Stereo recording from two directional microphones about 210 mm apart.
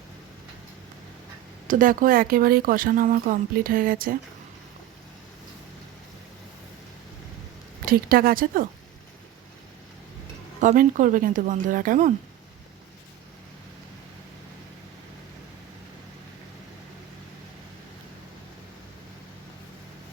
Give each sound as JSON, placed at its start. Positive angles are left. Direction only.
{"t": 1.6, "sound": "speech", "side_deg": -40}
{"t": 7.9, "sound": "speech", "side_deg": -45}
{"t": 10.6, "sound": "a woman's voice", "side_deg": -35}